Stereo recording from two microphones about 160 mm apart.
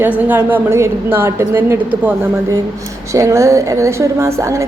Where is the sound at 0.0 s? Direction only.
10° right (ahead or behind).